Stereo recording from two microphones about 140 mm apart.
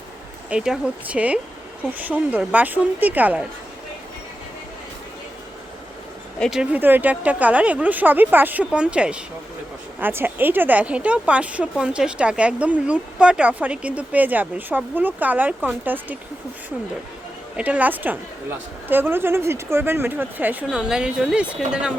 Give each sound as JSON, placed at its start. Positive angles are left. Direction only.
{"t": 0.5, "sound": "speech", "side_deg": -5}
{"t": 6.4, "sound": "speech", "side_deg": -5}
{"t": 6.7, "sound": "speech", "side_deg": -15}
{"t": 17.6, "sound": "speech", "side_deg": -10}